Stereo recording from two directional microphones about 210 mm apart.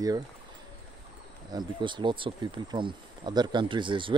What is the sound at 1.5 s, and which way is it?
Speech, 20° right (ahead or behind).